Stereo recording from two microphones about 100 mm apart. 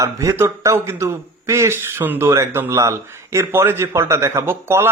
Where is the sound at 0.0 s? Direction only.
30° right (ahead or behind).